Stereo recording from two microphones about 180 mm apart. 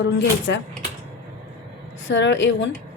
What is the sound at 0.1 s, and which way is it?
Speech, 80° left.